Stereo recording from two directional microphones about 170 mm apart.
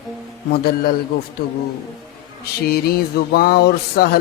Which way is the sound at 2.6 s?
65° left (ahead or behind).